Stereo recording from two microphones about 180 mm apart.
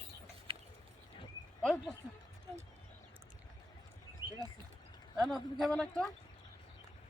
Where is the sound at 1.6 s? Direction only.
5° left (ahead or behind).